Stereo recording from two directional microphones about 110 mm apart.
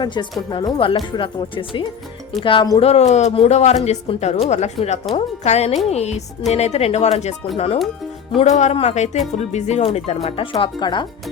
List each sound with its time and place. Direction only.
0.0 s speech: 45° left (ahead or behind)
2.8 s a man's voice: 80° left
7.5 s speech: 60° left (ahead or behind)
8.4 s speech: 90° left; by 10.2 s 70° left (ahead or behind)
10.2 s speech: 55° left (ahead or behind)